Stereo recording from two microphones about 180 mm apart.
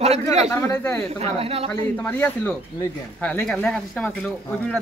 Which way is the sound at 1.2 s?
35° right (ahead or behind).